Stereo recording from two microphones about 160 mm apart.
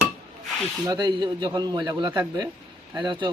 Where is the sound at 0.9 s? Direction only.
25° right (ahead or behind).